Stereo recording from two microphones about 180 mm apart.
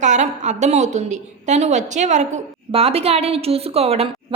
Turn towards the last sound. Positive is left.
turn(degrees=-35)  # may be behind; listen again after turning